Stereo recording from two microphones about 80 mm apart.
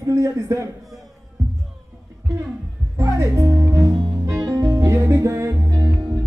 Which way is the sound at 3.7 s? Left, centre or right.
Right.